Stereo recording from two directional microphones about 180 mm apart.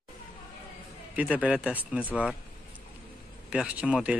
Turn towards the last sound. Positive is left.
turn(degrees=-5)  # may be behind; listen again after turning